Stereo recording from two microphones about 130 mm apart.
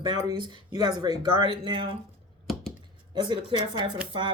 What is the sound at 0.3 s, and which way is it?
Speech, 30° right (ahead or behind).